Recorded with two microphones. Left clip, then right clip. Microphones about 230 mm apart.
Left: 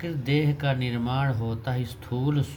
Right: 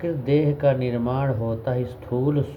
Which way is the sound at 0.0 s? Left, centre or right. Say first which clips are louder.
Right 6 dB; left.